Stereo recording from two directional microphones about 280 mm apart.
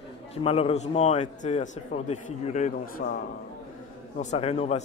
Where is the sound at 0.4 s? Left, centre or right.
Left.